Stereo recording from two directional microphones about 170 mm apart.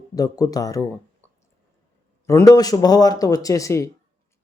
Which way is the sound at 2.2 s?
15° left (ahead or behind).